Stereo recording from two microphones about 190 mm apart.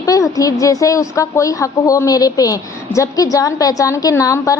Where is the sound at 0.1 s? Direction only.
20° left (ahead or behind).